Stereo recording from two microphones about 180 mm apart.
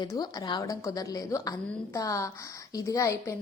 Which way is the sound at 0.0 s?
20° left (ahead or behind).